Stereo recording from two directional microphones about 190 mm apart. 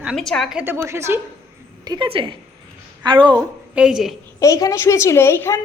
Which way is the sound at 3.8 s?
5° right (ahead or behind).